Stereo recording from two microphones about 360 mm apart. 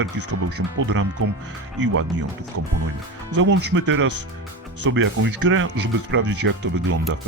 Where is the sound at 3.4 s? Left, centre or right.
Right.